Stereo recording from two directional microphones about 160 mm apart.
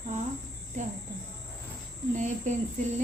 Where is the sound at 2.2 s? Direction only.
50° right (ahead or behind).